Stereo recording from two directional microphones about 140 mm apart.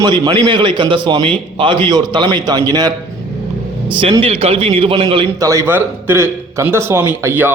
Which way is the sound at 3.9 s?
40° right (ahead or behind).